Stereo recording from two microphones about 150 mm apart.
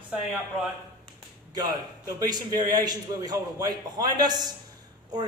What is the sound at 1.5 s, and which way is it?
A man's voice, 25° right (ahead or behind).